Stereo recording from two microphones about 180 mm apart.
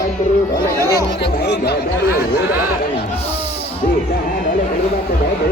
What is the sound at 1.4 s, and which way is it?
Speech, 65° left (ahead or behind).